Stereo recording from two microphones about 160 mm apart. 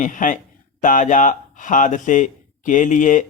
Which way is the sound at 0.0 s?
55° left (ahead or behind).